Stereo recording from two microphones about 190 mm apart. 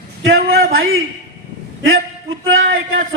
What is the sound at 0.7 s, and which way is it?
Speech, 90° right.